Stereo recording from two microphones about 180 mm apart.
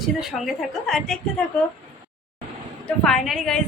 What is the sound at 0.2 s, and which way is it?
A woman's voice, centre (ahead or behind).